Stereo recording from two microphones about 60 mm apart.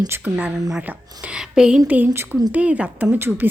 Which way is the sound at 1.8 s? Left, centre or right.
Right.